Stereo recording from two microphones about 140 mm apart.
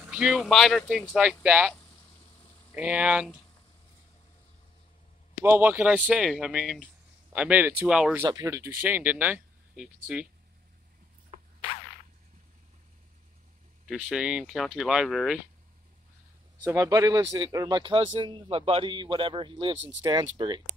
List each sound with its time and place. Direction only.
0.1 s speech: 5° right (ahead or behind)
2.7 s speech: 10° right (ahead or behind)
5.4 s speech: 15° right (ahead or behind)
8.3 s speech: 25° right (ahead or behind)
13.8 s speech: 5° right (ahead or behind)
16.6 s speech: 25° right (ahead or behind)